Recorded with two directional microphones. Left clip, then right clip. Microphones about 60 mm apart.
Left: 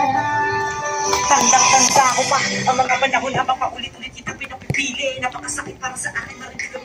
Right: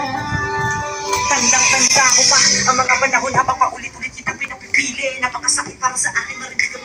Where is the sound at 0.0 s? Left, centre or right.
Right.